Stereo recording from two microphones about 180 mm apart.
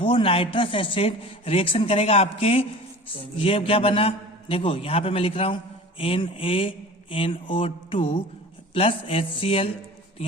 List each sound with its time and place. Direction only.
0.0 s a woman's voice: 30° left (ahead or behind)